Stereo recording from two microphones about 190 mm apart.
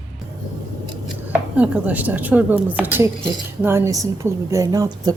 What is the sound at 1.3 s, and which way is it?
Speech, 5° right (ahead or behind).